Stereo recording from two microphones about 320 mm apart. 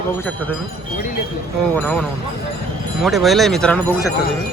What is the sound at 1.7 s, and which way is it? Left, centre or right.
Speech, centre.